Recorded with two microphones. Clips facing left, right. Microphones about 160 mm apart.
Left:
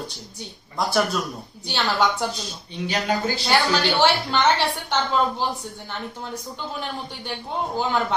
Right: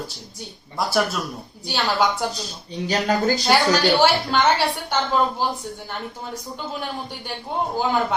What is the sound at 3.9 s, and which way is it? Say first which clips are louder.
A woman's voice: right 2 dB; 10° right (ahead or behind).